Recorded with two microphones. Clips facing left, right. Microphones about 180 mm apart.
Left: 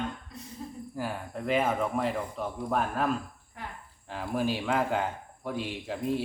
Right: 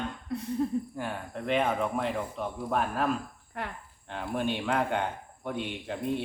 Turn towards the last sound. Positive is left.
turn(degrees=0)  # may be behind; listen again after turning